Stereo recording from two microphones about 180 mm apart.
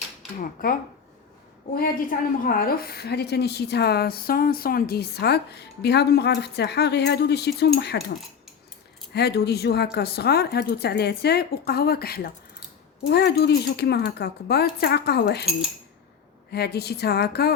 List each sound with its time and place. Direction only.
0.3 s a woman's voice: 50° left (ahead or behind)
9.1 s a woman's voice: 65° left (ahead or behind)
16.5 s a woman's voice: 65° left (ahead or behind)